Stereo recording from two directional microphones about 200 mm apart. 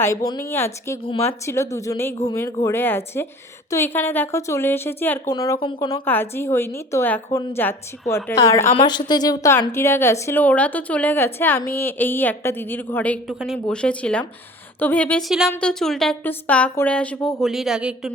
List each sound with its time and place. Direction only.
0.0 s a woman's voice: 15° left (ahead or behind)
6.1 s a woman's voice: 10° left (ahead or behind)
8.7 s a woman's voice: 25° left (ahead or behind); by 18.1 s 5° right (ahead or behind)